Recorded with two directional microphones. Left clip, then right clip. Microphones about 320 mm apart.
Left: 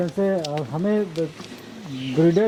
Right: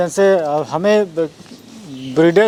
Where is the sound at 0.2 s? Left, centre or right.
Centre.